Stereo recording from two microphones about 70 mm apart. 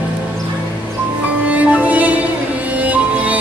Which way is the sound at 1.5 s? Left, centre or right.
Right.